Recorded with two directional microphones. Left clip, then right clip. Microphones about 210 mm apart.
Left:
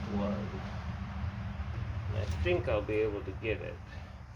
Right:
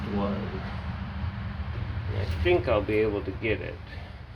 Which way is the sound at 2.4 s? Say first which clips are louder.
Right 7 dB; 35° right (ahead or behind).